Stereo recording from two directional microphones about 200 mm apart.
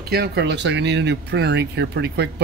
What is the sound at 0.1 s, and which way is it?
Speech, 55° right (ahead or behind).